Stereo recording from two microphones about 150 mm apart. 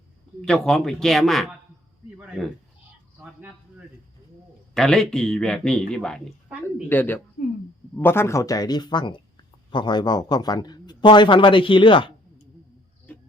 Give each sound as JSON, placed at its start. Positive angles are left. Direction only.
{"t": 0.4, "sound": "speech", "side_deg": 5}
{"t": 4.7, "sound": "a woman's voice", "side_deg": 5}